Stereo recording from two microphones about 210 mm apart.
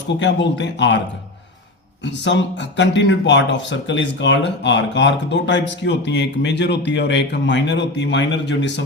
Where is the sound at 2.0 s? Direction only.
55° left (ahead or behind).